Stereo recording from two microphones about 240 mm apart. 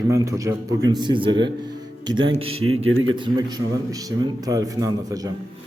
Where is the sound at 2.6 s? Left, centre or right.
Right.